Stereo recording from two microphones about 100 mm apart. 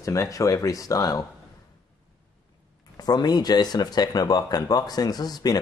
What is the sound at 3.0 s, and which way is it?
Speech, 40° left (ahead or behind).